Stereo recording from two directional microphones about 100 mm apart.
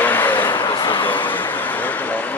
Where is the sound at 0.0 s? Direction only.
20° left (ahead or behind).